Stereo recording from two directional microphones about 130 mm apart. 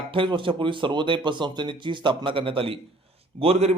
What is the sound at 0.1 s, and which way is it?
A man's voice, 40° right (ahead or behind).